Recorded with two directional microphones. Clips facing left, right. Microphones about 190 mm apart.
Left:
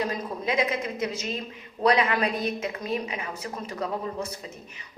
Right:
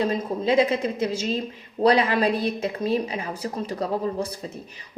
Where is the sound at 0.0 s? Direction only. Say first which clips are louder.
Right 5 dB; 30° right (ahead or behind).